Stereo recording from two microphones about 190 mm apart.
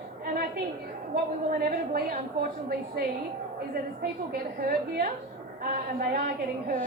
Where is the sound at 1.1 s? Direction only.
50° right (ahead or behind).